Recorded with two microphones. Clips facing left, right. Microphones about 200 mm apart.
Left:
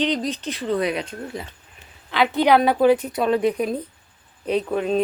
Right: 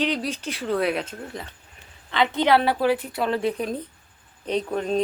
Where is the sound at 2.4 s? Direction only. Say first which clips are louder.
Left 5 dB; 15° left (ahead or behind).